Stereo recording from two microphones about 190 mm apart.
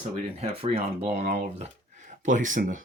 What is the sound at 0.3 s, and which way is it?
Speech, 30° right (ahead or behind).